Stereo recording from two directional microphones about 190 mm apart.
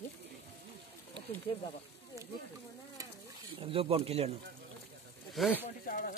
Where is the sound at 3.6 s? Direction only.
30° right (ahead or behind).